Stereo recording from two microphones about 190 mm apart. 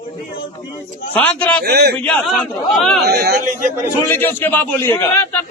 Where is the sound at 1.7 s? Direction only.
60° right (ahead or behind).